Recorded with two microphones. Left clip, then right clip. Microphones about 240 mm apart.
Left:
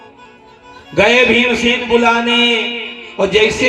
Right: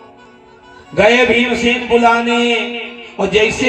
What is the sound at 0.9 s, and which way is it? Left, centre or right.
A man's voice, left.